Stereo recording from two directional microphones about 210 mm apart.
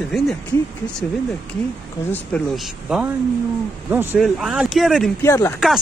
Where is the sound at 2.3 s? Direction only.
Centre (ahead or behind).